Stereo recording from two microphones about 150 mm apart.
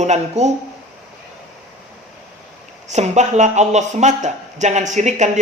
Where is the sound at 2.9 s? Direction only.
50° right (ahead or behind).